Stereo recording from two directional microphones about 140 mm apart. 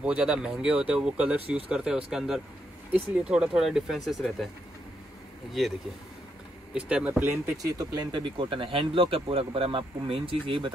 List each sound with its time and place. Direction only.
0.0 s speech: 5° right (ahead or behind)
6.7 s speech: 5° right (ahead or behind)
7.7 s speech: 25° right (ahead or behind)